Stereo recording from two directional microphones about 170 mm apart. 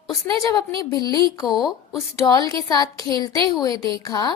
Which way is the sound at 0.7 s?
30° right (ahead or behind).